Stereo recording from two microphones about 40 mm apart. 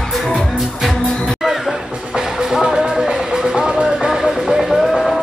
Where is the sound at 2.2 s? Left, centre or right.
Centre.